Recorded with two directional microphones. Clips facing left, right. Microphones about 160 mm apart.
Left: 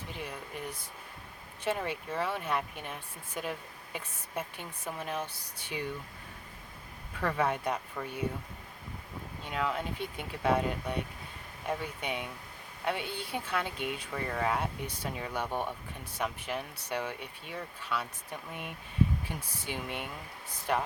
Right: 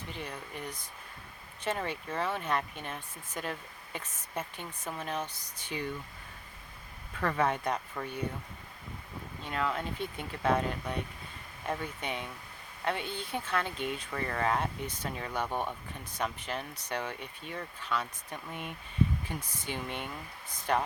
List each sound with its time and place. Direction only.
0.2 s speech: 5° left (ahead or behind)
7.2 s speech: 5° left (ahead or behind)
9.5 s speech: 10° left (ahead or behind)